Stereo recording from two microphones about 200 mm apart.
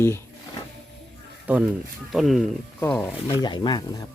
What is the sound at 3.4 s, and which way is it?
Speech, 20° left (ahead or behind).